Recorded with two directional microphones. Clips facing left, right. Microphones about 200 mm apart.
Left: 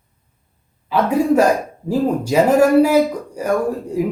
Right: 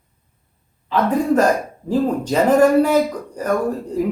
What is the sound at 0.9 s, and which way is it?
Speech, 10° left (ahead or behind).